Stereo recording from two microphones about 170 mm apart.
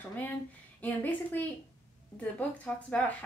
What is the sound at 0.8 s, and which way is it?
Speech, 10° left (ahead or behind).